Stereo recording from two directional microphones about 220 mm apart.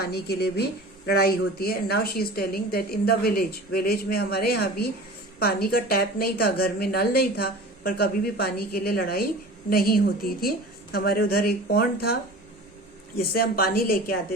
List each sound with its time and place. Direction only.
0.0 s speech: 45° left (ahead or behind)